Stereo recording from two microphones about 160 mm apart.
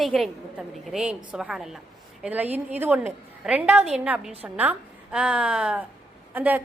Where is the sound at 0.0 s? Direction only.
Centre (ahead or behind).